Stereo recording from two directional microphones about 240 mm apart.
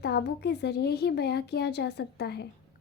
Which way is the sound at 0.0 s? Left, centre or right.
Left.